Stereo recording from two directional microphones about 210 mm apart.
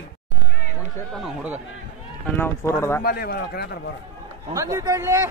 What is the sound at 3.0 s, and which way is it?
Speech, 50° left (ahead or behind).